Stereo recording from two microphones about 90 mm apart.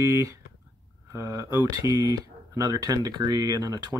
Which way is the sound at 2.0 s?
40° right (ahead or behind).